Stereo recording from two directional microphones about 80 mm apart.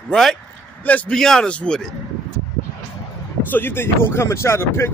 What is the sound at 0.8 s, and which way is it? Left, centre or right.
Speech, left.